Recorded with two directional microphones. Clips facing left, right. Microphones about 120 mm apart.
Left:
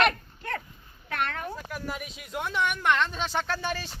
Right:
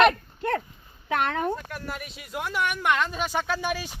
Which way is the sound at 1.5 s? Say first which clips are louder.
Right 2 dB; centre (ahead or behind).